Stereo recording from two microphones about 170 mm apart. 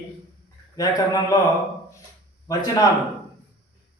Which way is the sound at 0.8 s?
20° left (ahead or behind).